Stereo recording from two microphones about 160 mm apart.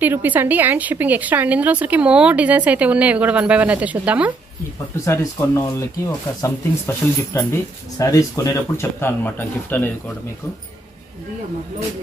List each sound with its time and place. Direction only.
0.0 s speech: 10° right (ahead or behind)
5.0 s speech: 15° left (ahead or behind)